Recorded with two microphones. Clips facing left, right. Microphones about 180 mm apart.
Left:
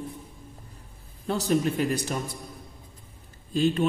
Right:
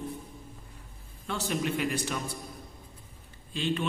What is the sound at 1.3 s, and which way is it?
A man's voice, 40° left (ahead or behind).